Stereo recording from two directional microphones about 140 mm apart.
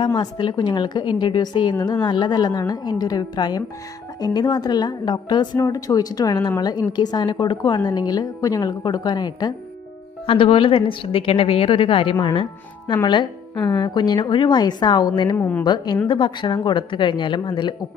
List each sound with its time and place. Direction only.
0.0 s a woman's voice: 35° left (ahead or behind)